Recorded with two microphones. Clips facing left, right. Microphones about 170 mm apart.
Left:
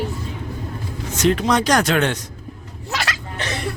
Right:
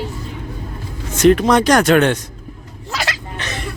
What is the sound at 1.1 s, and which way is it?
Speech, 55° right (ahead or behind).